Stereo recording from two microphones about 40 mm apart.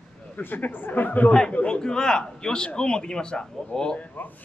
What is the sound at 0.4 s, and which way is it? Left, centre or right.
Speech, left.